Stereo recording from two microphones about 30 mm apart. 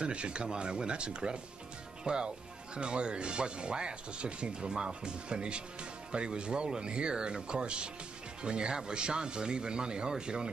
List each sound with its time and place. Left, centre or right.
0.0 s speech: right